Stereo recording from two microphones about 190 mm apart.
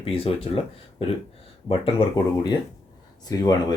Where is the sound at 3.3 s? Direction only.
20° left (ahead or behind).